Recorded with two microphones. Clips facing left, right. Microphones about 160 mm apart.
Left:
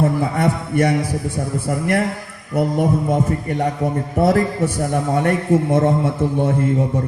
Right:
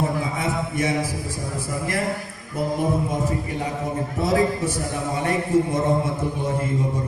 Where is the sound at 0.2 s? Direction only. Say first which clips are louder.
Left 6 dB; 65° left (ahead or behind).